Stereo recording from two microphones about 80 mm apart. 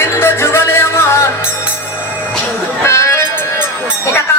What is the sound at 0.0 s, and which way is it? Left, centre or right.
Music, left.